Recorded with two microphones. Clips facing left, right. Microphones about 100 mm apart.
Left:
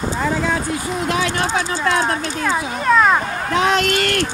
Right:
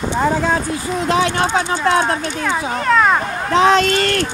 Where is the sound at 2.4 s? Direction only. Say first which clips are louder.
Even; 5° left (ahead or behind).